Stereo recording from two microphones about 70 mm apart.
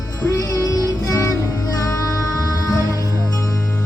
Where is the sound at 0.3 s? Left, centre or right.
Left.